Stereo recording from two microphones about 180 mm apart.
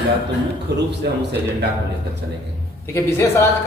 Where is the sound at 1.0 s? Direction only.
65° right (ahead or behind).